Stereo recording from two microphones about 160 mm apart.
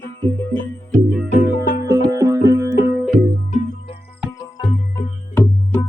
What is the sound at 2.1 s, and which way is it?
Music, 20° right (ahead or behind).